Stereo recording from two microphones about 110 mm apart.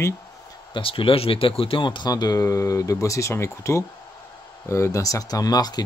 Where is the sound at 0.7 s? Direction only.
55° left (ahead or behind).